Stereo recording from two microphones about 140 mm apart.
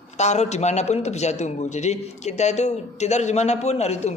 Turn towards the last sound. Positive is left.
turn(degrees=50)  # may be behind; listen again after turning